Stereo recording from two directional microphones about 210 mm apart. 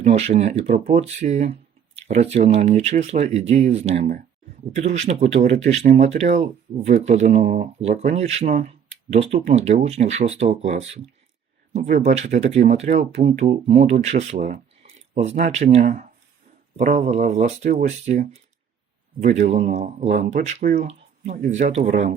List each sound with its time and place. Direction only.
0.0 s speech: 30° right (ahead or behind)